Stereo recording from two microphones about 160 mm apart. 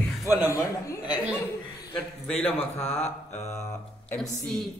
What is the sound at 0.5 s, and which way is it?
Speech, 20° left (ahead or behind).